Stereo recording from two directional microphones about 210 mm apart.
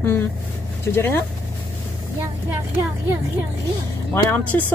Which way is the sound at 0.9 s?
10° left (ahead or behind).